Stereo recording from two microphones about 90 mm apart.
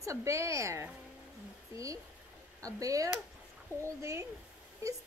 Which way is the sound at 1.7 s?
35° right (ahead or behind).